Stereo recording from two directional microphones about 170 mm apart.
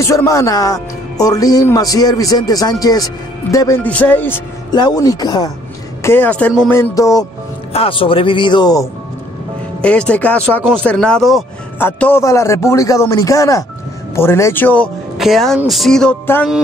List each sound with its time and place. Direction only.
0.0 s a man's voice: 20° left (ahead or behind)
4.6 s speech: 25° left (ahead or behind)
6.0 s a man's voice: 10° left (ahead or behind)
7.7 s a man's voice: 35° left (ahead or behind)
9.8 s a man's voice: 5° left (ahead or behind)
10.7 s music: 5° left (ahead or behind)
11.8 s a man's voice: 10° left (ahead or behind)
15.1 s music: centre (ahead or behind)